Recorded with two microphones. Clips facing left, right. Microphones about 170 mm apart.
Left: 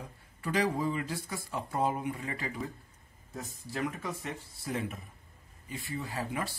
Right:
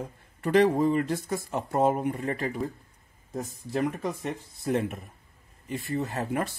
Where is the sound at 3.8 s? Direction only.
40° right (ahead or behind).